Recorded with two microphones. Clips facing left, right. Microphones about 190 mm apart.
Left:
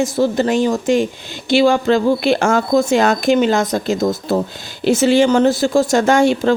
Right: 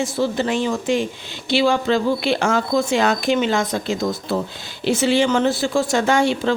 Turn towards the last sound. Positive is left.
turn(degrees=45)  # may be behind; listen again after turning